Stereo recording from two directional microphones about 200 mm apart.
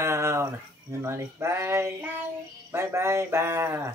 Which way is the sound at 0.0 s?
15° right (ahead or behind).